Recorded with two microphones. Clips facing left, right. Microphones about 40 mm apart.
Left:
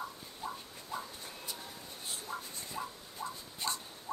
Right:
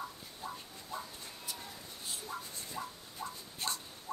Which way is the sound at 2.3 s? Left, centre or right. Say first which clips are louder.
Left 2 dB; left.